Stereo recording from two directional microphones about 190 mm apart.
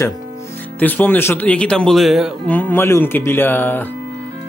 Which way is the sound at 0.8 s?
10° left (ahead or behind).